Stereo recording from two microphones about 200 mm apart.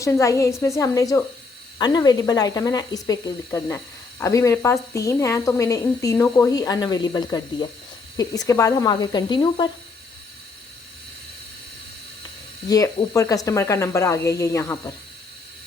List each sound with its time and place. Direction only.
0.0 s speech: 15° left (ahead or behind)
12.6 s speech: 15° left (ahead or behind)